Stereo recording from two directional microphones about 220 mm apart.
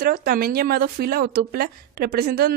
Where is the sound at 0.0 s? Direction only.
40° right (ahead or behind).